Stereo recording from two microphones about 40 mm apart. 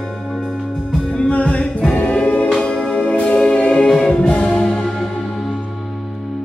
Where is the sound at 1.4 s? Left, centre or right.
Left.